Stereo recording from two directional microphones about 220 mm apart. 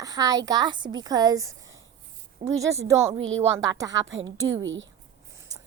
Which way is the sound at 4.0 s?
60° right (ahead or behind).